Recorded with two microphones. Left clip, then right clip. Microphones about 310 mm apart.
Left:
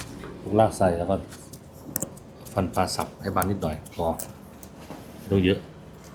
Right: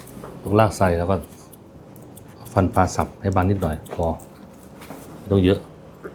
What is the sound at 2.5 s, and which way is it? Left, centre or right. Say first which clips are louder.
Speech: right 6 dB; centre.